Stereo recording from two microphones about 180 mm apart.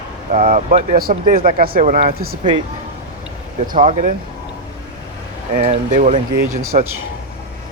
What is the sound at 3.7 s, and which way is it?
Speech, 45° right (ahead or behind).